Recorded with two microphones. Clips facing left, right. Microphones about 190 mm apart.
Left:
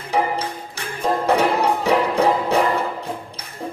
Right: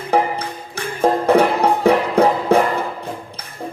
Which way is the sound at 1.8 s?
55° right (ahead or behind).